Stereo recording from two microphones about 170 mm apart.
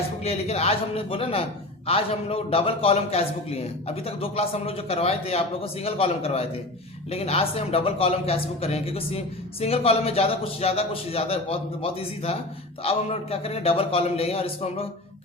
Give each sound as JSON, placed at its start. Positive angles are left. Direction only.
{"t": 0.3, "sound": "speech", "side_deg": 40}